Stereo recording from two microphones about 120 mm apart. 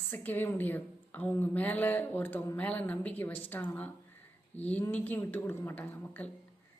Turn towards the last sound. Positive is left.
turn(degrees=15)  # may be behind; listen again after turning